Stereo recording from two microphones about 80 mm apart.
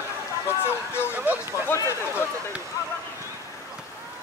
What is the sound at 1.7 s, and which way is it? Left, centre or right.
Speech, left.